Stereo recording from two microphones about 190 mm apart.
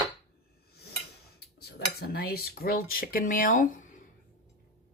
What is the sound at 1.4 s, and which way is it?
Cutlery, 60° left (ahead or behind).